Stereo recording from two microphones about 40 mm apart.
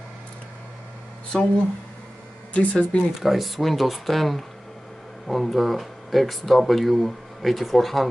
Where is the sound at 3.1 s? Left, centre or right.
Centre.